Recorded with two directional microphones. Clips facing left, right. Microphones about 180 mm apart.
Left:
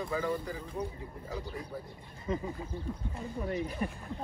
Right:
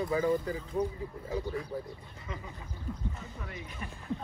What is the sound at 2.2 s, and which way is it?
Speech, 35° left (ahead or behind).